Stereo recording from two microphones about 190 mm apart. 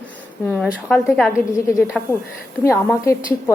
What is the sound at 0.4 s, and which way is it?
A woman's voice, 10° left (ahead or behind).